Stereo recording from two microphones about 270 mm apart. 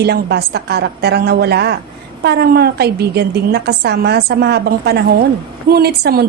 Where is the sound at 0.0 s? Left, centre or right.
Right.